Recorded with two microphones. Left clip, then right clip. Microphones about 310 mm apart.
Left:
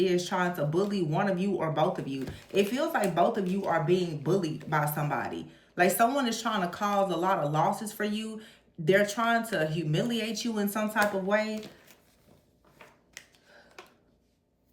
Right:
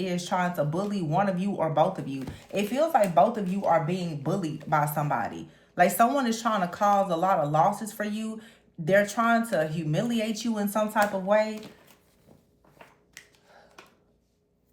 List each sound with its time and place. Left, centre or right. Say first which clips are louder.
0.0 s speech: left 1 dB; centre
13.2 s finger snapping: even; centre